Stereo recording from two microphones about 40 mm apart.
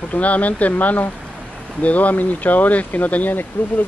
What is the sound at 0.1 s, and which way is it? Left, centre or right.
Speech, left.